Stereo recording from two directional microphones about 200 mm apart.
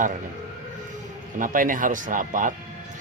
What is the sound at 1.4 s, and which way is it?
Speech, 40° right (ahead or behind).